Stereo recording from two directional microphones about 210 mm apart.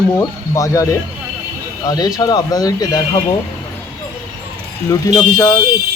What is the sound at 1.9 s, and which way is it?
Speech, 20° left (ahead or behind).